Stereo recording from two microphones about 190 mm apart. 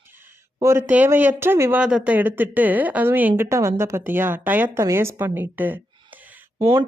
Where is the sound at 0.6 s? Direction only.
15° right (ahead or behind).